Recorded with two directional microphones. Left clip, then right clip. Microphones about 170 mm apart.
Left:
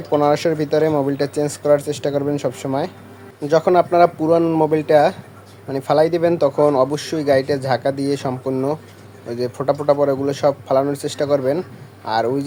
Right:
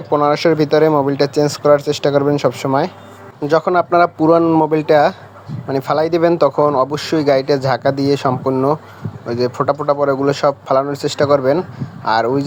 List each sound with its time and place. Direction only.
0.1 s speech: 20° right (ahead or behind)